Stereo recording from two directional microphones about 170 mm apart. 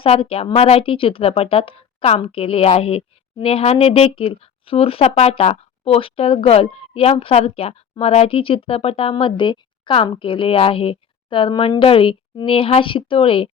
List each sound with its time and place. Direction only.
0.0 s speech: 35° left (ahead or behind)